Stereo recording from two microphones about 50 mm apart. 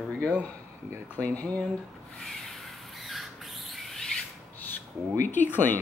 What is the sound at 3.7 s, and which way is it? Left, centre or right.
Rodents, centre.